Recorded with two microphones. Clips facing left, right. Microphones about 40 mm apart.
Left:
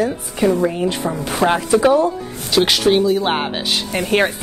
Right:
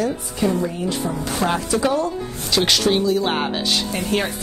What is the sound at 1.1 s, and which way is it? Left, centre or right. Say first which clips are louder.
A woman's voice: left 5 dB; left.